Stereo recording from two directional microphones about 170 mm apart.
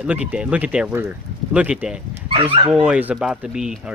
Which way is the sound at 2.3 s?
30° right (ahead or behind).